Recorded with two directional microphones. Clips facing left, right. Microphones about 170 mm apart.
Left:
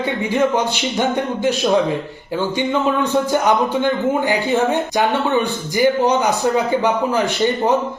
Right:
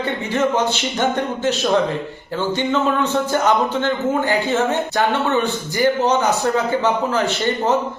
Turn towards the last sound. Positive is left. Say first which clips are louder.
# left 2 dB
turn(degrees=15)  # may be behind; listen again after turning